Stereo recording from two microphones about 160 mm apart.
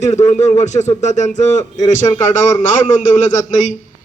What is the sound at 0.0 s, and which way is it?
A man's voice, 45° left (ahead or behind).